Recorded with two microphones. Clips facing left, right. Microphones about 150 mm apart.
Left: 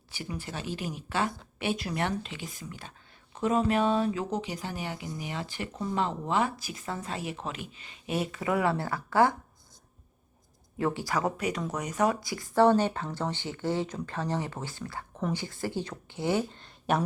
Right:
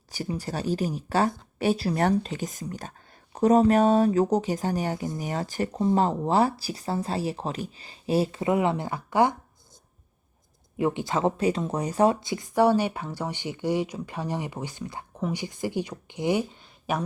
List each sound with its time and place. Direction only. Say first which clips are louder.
0.1 s speech: right 6 dB; 40° right (ahead or behind); by 9.3 s 20° right (ahead or behind)
10.8 s speech: right 4 dB; 20° right (ahead or behind)
16.9 s speech: left 1 dB; centre (ahead or behind)